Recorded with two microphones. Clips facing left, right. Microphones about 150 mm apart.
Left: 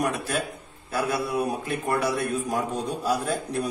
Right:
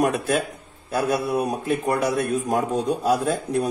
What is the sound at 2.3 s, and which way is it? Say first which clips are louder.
A man's voice: right 5 dB; 60° right (ahead or behind).